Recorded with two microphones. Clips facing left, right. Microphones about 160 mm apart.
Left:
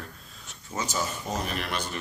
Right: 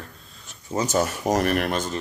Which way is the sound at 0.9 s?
70° right (ahead or behind).